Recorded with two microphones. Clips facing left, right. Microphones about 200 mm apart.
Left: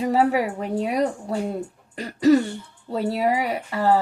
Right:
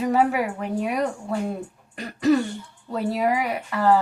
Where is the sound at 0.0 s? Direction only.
35° left (ahead or behind).